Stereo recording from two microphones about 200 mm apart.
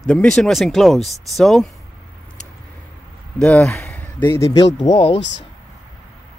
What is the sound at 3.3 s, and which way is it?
Speech, 5° left (ahead or behind).